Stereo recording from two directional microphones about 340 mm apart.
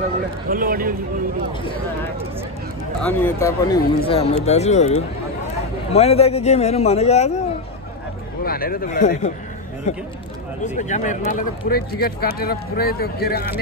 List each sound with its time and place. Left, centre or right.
0.5 s speech: right
3.0 s speech: centre
8.5 s speech: left